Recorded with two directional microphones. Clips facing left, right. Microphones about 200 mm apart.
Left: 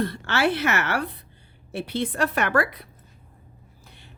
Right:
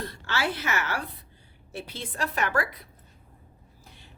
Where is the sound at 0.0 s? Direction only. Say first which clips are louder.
Left 7 dB; 65° left (ahead or behind).